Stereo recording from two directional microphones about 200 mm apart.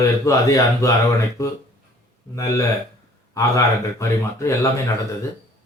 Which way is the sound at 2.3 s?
15° left (ahead or behind).